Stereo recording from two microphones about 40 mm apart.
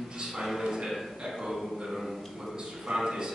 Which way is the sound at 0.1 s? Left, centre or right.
Centre.